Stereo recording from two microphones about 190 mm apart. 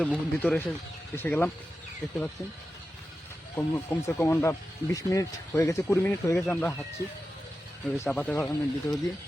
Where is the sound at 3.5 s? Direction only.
10° left (ahead or behind).